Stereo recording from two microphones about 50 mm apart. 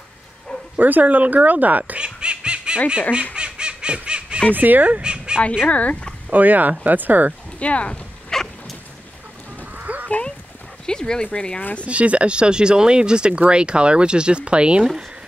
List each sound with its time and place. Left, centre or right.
0.7 s speech: right
2.0 s snicker: centre
3.3 s bird: centre
4.6 s speech: right
5.7 s speech: left
6.3 s speech: right
7.5 s speech: left
8.3 s a sound: centre
9.8 s honk: right
10.9 s speech: centre
11.8 s speech: right